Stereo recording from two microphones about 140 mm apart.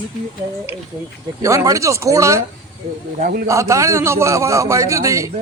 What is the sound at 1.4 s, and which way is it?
A man's voice, 20° right (ahead or behind).